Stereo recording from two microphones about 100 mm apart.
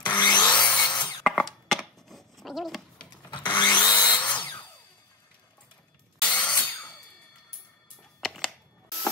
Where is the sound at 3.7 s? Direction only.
45° left (ahead or behind).